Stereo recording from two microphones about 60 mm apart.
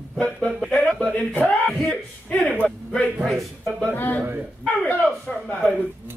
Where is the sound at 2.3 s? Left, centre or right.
Left.